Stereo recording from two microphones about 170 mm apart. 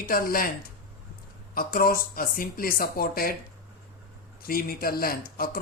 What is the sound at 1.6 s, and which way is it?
Speech, 60° left (ahead or behind).